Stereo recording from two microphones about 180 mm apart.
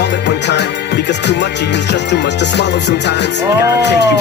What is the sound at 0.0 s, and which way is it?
Music, 75° left (ahead or behind).